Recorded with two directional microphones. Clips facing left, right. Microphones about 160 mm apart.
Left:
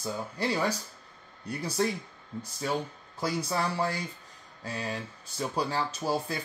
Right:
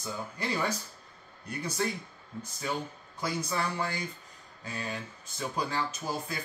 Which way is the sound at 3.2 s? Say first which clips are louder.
Left 2 dB; 35° left (ahead or behind).